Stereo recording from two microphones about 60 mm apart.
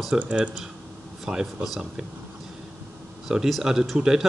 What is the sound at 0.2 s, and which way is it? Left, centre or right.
A man's voice, centre.